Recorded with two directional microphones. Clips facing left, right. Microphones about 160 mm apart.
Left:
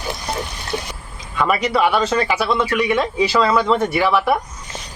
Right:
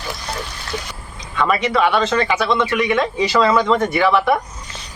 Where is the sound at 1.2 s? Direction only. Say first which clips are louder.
Even; 10° left (ahead or behind).